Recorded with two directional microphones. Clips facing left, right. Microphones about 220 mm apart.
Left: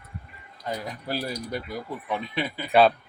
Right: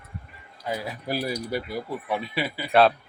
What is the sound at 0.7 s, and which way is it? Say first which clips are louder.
Speech: right 2 dB; 10° right (ahead or behind).